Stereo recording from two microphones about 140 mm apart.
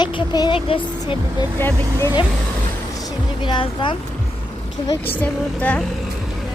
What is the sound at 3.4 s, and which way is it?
Speech, 35° left (ahead or behind).